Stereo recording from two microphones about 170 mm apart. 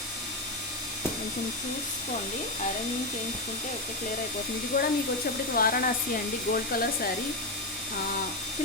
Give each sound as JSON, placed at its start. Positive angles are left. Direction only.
{"t": 4.7, "sound": "speech", "side_deg": 70}
{"t": 5.5, "sound": "hair dryer", "side_deg": 60}